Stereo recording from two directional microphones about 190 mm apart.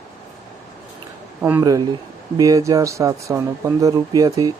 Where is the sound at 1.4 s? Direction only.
15° right (ahead or behind).